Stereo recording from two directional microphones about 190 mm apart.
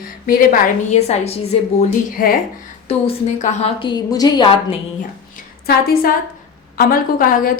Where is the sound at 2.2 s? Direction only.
45° left (ahead or behind).